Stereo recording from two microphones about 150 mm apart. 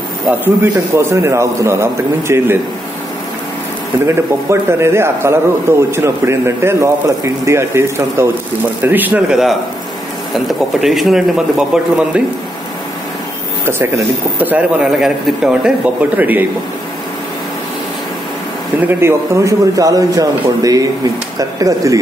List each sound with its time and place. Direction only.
0.6 s a man's voice: 15° right (ahead or behind)
4.1 s a man's voice: 15° right (ahead or behind)
13.7 s a man's voice: 15° right (ahead or behind)
18.8 s speech: 15° right (ahead or behind)